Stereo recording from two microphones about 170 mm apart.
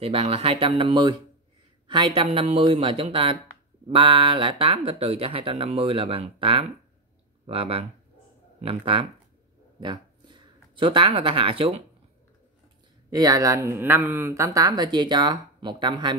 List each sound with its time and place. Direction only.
0.0 s speech: 35° right (ahead or behind)
13.1 s speech: 20° right (ahead or behind)